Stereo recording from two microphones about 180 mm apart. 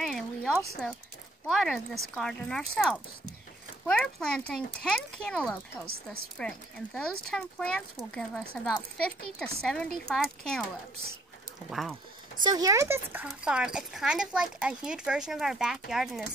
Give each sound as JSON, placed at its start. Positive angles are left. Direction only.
{"t": 0.0, "sound": "a sound", "side_deg": 0}
{"t": 1.5, "sound": "speech", "side_deg": 0}
{"t": 11.7, "sound": "speech", "side_deg": 0}
{"t": 12.4, "sound": "speech", "side_deg": -20}